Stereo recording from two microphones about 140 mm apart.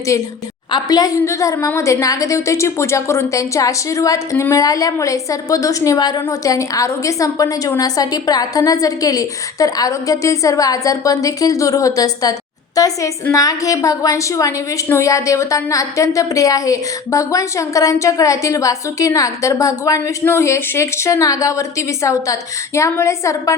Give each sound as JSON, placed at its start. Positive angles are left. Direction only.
{"t": 0.1, "sound": "a woman's voice", "side_deg": 25}